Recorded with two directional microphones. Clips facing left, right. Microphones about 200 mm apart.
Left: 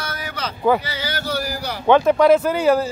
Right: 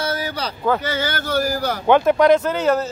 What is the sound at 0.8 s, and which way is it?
Speech, 50° right (ahead or behind).